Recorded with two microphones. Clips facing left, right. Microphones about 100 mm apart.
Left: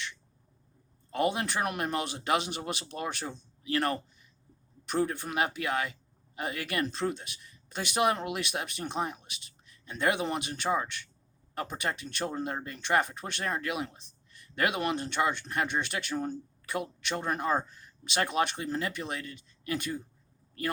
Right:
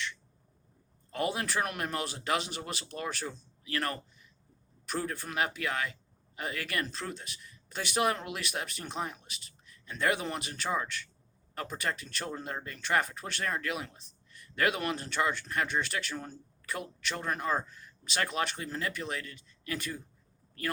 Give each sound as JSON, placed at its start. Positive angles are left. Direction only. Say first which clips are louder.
{"t": 1.1, "sound": "speech", "louder": "left 3 dB", "side_deg": 15}